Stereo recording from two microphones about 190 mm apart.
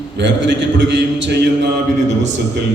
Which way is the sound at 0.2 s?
65° right (ahead or behind).